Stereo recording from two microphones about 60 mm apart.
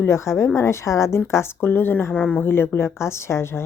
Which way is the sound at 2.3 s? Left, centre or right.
Left.